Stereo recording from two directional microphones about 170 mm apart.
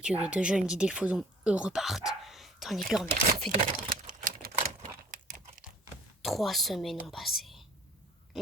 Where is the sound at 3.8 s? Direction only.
60° right (ahead or behind).